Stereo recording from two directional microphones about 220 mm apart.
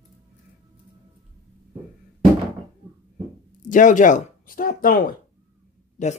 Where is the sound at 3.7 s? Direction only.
35° left (ahead or behind).